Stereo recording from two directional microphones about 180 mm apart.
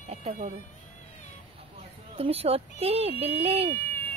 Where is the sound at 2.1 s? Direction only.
35° right (ahead or behind).